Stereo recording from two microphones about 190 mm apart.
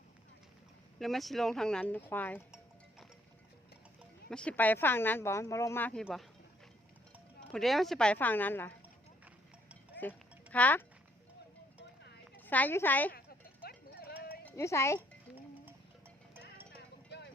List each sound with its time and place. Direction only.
0.9 s speech: centre (ahead or behind)
4.3 s speech: 5° left (ahead or behind)
7.5 s speech: centre (ahead or behind)
10.0 s a sound: 10° left (ahead or behind)
12.4 s a woman's voice: 10° left (ahead or behind)
13.1 s a sound: 55° left (ahead or behind)
14.4 s speech: 15° left (ahead or behind)